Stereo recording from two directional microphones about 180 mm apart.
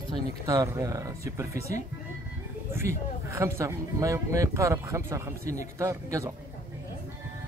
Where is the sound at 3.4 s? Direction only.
15° right (ahead or behind).